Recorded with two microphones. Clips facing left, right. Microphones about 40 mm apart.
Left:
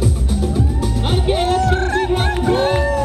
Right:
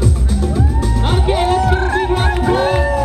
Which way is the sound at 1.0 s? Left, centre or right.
Centre.